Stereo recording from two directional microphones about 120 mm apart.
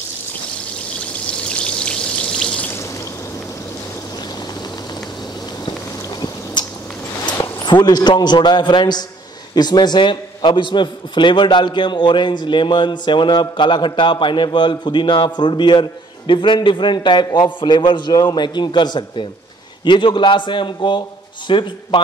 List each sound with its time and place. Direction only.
1.2 s a sound: 10° left (ahead or behind)
6.6 s squish: 40° left (ahead or behind)
7.6 s a man's voice: 40° left (ahead or behind)